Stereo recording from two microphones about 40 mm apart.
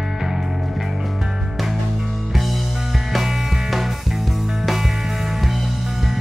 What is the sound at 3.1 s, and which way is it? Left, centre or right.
Music, centre.